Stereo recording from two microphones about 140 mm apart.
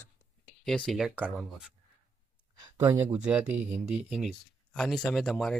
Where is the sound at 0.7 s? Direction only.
5° left (ahead or behind).